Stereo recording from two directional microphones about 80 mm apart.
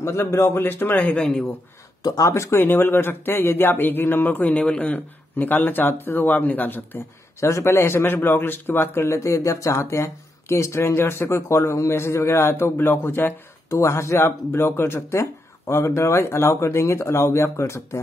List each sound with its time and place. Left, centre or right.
0.0 s speech: left; by 1.5 s centre
2.0 s speech: left
2.6 s speech: left
7.3 s speech: left
13.7 s speech: left